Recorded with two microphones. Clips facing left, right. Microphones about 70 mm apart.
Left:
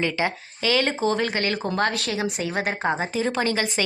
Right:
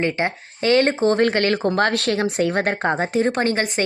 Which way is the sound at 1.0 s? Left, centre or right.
Right.